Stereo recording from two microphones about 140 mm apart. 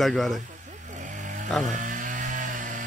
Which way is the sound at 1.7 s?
65° right (ahead or behind).